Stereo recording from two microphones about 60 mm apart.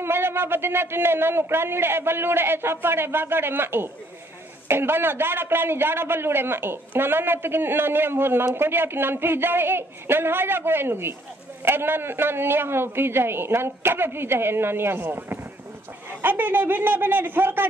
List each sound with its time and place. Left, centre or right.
0.0 s speech: right